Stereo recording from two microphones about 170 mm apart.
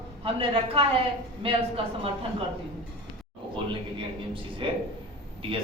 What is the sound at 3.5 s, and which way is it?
A man's voice, 30° right (ahead or behind).